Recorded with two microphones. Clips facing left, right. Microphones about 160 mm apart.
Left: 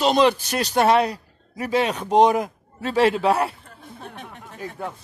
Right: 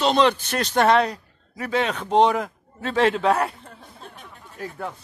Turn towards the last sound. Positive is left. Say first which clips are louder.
# even
turn(degrees=0)  # may be behind; listen again after turning